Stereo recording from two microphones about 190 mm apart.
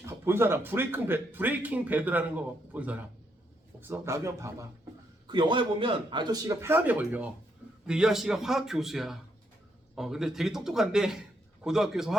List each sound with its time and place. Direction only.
0.0 s a man's voice: 10° right (ahead or behind)